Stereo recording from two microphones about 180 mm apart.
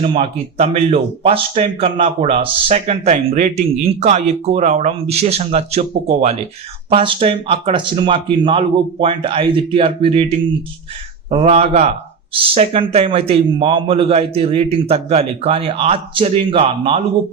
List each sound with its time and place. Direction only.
0.0 s speech: 35° right (ahead or behind)